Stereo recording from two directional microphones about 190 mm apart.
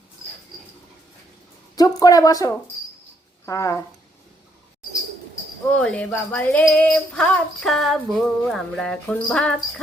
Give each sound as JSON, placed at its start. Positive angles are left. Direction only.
{"t": 2.0, "sound": "speech", "side_deg": 20}
{"t": 5.7, "sound": "female singing", "side_deg": 5}